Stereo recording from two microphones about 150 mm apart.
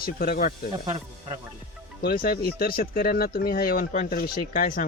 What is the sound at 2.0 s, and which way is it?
Speech, 85° left.